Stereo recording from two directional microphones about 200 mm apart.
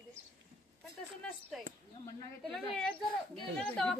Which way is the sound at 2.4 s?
5° left (ahead or behind).